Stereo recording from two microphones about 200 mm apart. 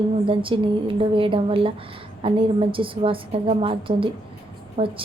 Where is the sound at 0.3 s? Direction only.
25° right (ahead or behind).